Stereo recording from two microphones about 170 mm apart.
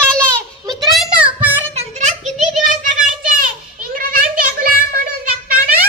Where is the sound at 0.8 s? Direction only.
Centre (ahead or behind).